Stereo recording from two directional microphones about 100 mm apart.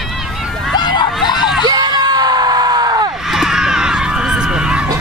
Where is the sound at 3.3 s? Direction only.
5° right (ahead or behind).